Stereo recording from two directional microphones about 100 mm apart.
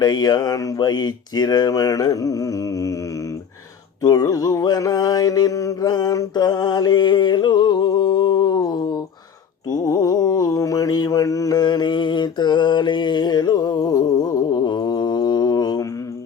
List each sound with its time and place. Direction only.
0.0 s mantra: 40° left (ahead or behind)
4.0 s mantra: 35° left (ahead or behind)